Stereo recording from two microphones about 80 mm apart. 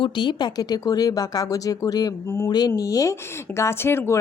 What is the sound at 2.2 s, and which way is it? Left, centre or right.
Speech, left.